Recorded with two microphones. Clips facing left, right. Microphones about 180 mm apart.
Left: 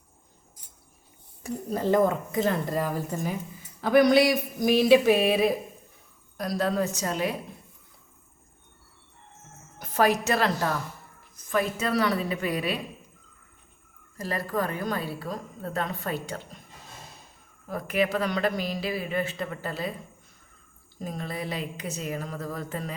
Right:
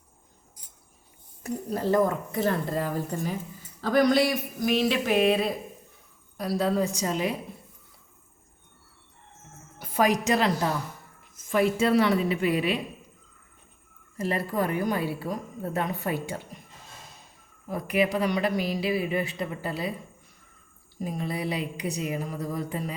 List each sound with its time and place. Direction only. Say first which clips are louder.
1.7 s speech: left 1 dB; 20° left (ahead or behind)
6.4 s speech: right 1 dB; 10° right (ahead or behind)
9.8 s a woman's voice: even; 10° right (ahead or behind)
14.2 s a woman's voice: right 2 dB; 20° right (ahead or behind)
17.7 s speech: right 1 dB; 15° right (ahead or behind)
21.0 s speech: right 3 dB; 10° right (ahead or behind)